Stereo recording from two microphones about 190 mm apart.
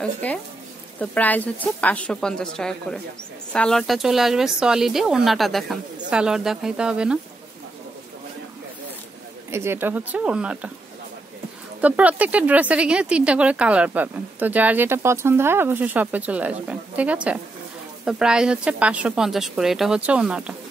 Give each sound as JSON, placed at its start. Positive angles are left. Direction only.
{"t": 0.0, "sound": "speech", "side_deg": 5}
{"t": 9.5, "sound": "speech", "side_deg": -15}
{"t": 11.8, "sound": "speech", "side_deg": -10}